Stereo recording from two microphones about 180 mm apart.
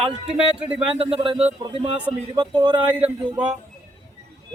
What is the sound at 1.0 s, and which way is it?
A man's voice, 30° right (ahead or behind).